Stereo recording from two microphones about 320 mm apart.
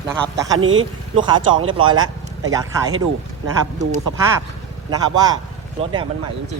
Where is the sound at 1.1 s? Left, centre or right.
Centre.